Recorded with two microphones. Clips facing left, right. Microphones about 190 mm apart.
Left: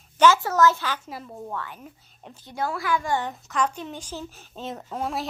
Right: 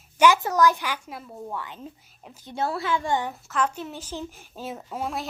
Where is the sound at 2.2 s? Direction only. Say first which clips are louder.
Left 2 dB; 5° right (ahead or behind).